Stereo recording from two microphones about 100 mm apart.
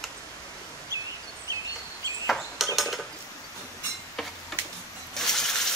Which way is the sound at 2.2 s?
Centre (ahead or behind).